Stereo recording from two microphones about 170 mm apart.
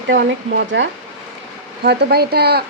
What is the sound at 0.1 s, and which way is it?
Speech, 90° right.